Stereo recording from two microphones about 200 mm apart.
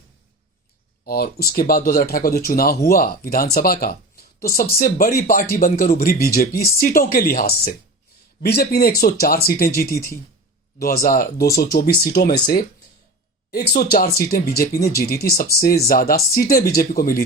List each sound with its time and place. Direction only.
1.0 s speech: 50° left (ahead or behind)
13.5 s speech: 50° left (ahead or behind)